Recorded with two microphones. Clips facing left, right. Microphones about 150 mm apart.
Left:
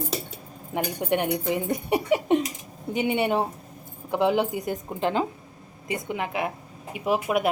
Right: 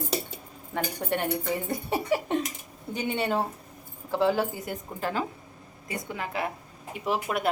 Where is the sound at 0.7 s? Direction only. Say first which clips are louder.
Left 4 dB; 15° left (ahead or behind).